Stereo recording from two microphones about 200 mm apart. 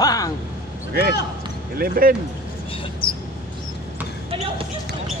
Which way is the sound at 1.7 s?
45° right (ahead or behind).